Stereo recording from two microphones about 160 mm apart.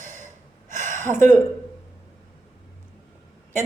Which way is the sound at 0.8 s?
15° left (ahead or behind).